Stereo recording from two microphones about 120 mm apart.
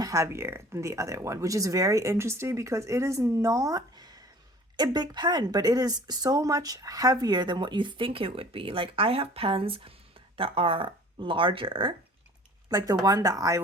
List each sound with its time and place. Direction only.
0.0 s speech: 25° right (ahead or behind); by 11.9 s 45° right (ahead or behind)
12.7 s speech: 35° right (ahead or behind)